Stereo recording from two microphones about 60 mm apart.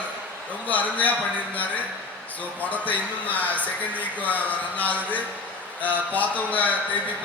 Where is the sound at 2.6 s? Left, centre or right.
Left.